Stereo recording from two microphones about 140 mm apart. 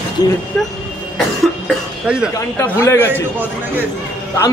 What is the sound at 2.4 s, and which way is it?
Speech, 20° left (ahead or behind).